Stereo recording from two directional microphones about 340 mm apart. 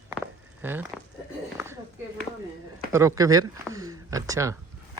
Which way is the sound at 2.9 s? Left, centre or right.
Centre.